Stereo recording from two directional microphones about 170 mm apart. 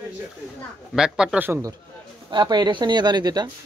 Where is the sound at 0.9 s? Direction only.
5° right (ahead or behind).